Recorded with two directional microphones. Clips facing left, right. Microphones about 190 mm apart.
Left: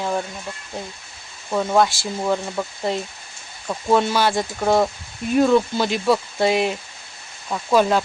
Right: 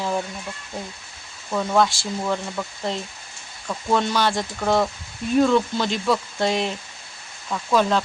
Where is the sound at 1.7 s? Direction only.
5° left (ahead or behind).